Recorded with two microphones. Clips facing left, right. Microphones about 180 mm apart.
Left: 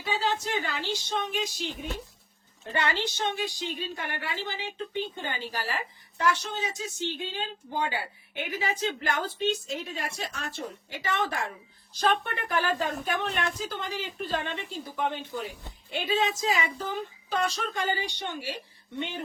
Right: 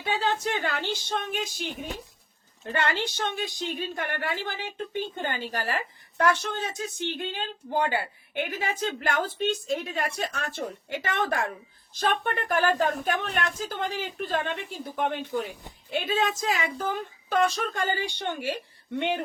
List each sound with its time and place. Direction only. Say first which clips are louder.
0.0 s speech: right 2 dB; 55° right (ahead or behind)
2.7 s speech: right 1 dB; 55° right (ahead or behind)